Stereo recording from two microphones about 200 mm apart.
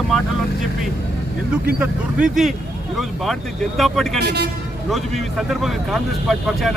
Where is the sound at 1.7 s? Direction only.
5° right (ahead or behind).